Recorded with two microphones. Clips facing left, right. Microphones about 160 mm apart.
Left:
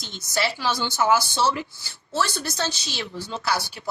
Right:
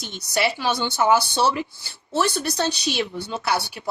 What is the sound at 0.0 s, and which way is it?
Speech, 65° right (ahead or behind).